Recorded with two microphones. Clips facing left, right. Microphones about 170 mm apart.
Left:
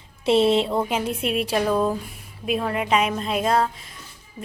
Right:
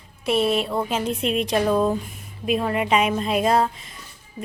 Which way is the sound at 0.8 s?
10° left (ahead or behind).